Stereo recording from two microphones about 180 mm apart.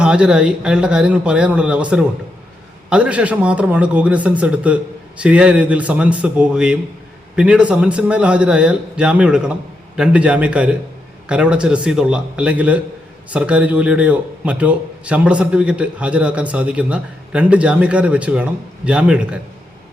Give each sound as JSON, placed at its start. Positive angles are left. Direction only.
{"t": 0.0, "sound": "a man's voice", "side_deg": -5}